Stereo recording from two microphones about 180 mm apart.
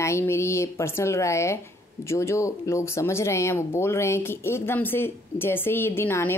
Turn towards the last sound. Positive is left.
turn(degrees=10)  # may be behind; listen again after turning